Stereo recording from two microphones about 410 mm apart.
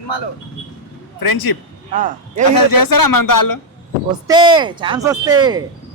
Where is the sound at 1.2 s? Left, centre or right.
Left.